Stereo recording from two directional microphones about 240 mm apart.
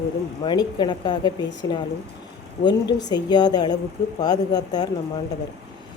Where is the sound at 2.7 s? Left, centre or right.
Centre.